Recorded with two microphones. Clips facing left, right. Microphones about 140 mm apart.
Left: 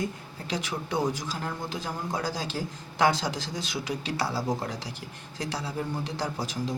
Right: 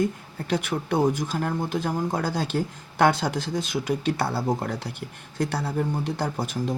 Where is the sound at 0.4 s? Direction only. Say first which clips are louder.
Right 6 dB; 55° right (ahead or behind).